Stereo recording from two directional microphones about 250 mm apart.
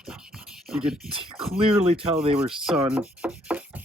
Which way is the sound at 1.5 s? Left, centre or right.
Right.